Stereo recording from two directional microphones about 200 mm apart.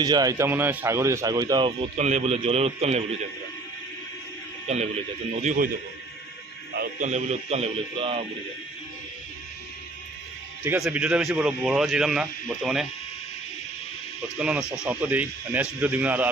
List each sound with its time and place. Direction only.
0.0 s speech: 20° right (ahead or behind)
2.0 s a man's voice: 35° right (ahead or behind)
5.4 s a man's voice: 40° right (ahead or behind)
6.7 s a man's voice: 50° right (ahead or behind)
7.1 s a man's voice: 35° right (ahead or behind)
10.6 s a man's voice: 10° right (ahead or behind)
14.3 s speech: 5° right (ahead or behind)